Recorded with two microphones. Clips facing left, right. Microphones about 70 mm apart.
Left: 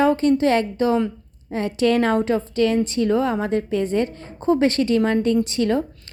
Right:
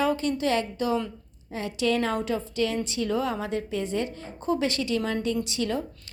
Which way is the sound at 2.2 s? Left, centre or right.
Left.